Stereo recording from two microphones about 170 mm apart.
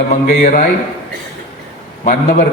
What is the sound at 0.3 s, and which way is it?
Speech, 50° left (ahead or behind).